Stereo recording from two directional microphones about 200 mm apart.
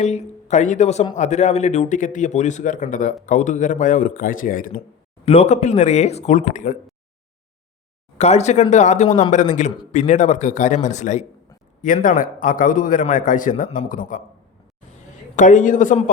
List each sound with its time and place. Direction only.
0.0 s a man's voice: 35° left (ahead or behind)
5.2 s a man's voice: 30° left (ahead or behind)
8.2 s a man's voice: 35° left (ahead or behind)
15.4 s a man's voice: 40° left (ahead or behind)